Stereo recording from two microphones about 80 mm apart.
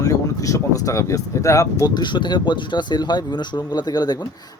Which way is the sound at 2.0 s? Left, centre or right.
Left.